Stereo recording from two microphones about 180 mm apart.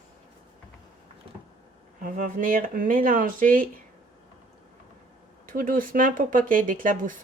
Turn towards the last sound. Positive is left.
turn(degrees=-50)  # may be behind; listen again after turning